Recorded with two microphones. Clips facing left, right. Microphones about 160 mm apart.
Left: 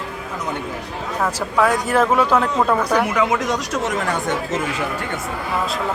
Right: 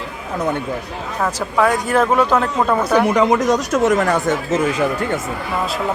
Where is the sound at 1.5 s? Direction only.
5° left (ahead or behind).